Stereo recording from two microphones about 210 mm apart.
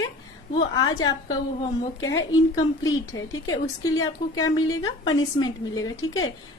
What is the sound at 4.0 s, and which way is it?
A woman's voice, 15° left (ahead or behind).